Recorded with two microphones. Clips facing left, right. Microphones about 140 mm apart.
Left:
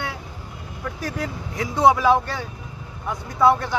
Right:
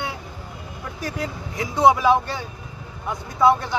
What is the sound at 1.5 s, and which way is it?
Speech, 15° right (ahead or behind).